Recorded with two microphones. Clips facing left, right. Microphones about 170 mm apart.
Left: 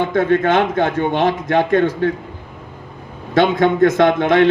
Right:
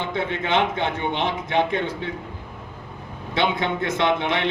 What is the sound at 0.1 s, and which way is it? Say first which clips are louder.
A man's voice: left 7 dB; 45° left (ahead or behind).